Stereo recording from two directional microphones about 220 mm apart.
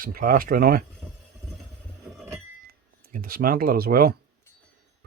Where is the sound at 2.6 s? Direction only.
40° right (ahead or behind).